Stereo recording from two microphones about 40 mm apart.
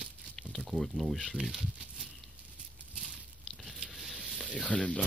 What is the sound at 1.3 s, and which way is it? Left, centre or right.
Speech, centre.